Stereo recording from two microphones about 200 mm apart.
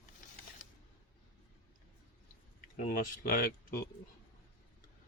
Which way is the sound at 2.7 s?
45° left (ahead or behind).